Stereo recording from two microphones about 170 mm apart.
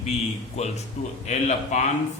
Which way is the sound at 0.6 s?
40° left (ahead or behind).